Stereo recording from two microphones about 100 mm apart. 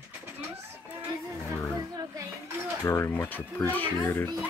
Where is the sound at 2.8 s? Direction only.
25° left (ahead or behind).